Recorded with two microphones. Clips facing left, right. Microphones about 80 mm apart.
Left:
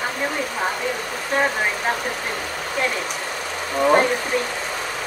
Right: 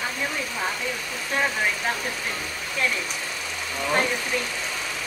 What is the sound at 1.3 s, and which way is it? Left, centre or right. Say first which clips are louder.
Speech: left 4 dB; left.